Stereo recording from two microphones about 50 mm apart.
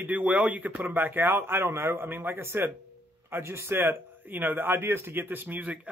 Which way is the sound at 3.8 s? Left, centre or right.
Right.